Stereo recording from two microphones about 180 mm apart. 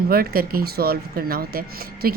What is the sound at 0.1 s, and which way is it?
Speech, 55° right (ahead or behind).